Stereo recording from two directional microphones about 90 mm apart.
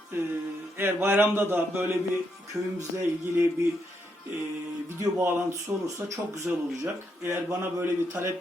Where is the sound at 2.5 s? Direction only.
35° right (ahead or behind).